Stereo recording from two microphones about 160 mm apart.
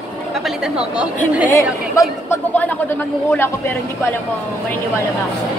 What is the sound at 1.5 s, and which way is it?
Speech, 20° left (ahead or behind).